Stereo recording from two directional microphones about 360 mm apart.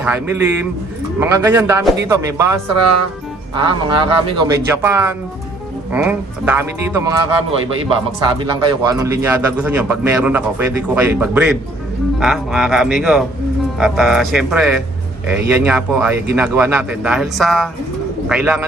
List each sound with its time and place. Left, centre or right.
0.0 s speech: centre
2.7 s speech: right
3.5 s speech: centre
8.3 s speech: centre